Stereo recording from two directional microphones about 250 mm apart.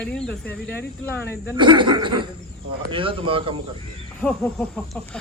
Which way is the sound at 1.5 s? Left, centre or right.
Centre.